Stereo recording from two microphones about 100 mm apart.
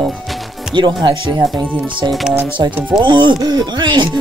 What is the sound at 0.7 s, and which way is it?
Speech, 50° right (ahead or behind).